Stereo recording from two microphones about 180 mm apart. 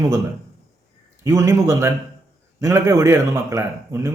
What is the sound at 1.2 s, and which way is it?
Speech, 15° right (ahead or behind).